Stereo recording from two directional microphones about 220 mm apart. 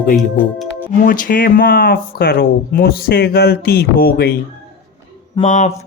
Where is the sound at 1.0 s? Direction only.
40° left (ahead or behind).